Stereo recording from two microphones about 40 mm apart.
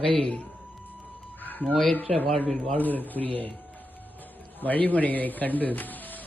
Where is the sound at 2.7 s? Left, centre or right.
Left.